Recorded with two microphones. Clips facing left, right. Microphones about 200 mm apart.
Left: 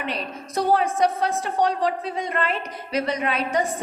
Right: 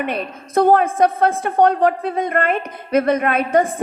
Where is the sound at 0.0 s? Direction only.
55° right (ahead or behind).